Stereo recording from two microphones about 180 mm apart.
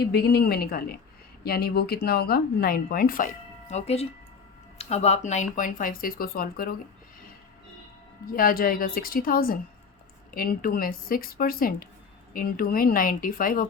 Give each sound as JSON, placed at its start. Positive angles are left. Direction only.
{"t": 0.0, "sound": "a woman's voice", "side_deg": 65}
{"t": 3.7, "sound": "speech", "side_deg": 35}
{"t": 8.3, "sound": "speech", "side_deg": 50}